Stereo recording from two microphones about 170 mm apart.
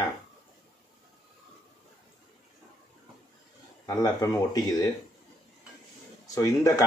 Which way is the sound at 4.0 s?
20° left (ahead or behind).